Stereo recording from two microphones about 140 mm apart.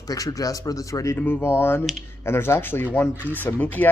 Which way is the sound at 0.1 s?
25° left (ahead or behind).